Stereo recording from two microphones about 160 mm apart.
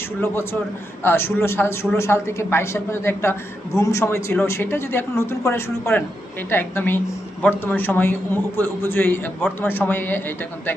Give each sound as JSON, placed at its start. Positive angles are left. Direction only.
{"t": 1.0, "sound": "a man's voice", "side_deg": 15}